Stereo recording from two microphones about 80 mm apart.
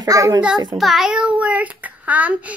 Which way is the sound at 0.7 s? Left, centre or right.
Centre.